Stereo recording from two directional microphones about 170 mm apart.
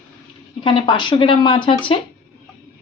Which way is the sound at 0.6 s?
30° left (ahead or behind).